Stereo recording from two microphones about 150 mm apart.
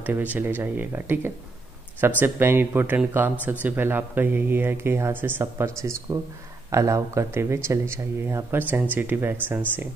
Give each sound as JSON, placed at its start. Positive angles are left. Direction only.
{"t": 0.0, "sound": "speech", "side_deg": -10}